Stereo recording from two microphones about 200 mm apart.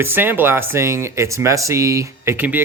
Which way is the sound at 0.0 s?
10° right (ahead or behind).